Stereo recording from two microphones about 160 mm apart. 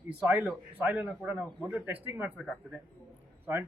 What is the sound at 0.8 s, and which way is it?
A man's voice, 10° right (ahead or behind).